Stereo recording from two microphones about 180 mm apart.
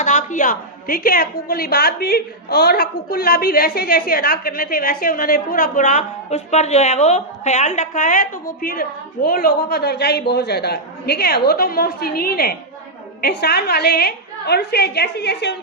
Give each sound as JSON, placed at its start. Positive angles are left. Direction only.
{"t": 0.0, "sound": "a woman's voice", "side_deg": 45}